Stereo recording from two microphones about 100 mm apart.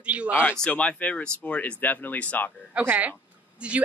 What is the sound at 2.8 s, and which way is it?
Speech, 20° right (ahead or behind).